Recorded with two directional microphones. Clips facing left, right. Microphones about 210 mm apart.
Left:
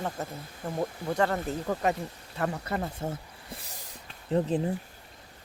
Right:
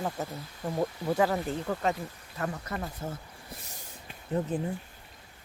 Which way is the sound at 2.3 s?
30° left (ahead or behind).